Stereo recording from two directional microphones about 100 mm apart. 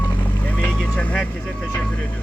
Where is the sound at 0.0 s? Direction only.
15° left (ahead or behind).